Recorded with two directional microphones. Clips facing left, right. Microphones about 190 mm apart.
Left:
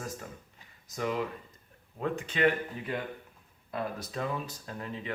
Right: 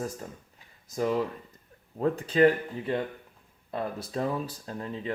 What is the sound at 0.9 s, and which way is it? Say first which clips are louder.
Speech: right 5 dB; 35° right (ahead or behind).